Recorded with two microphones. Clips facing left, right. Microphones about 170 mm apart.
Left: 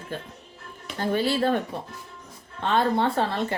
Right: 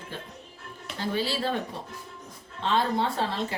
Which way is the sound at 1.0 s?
50° left (ahead or behind).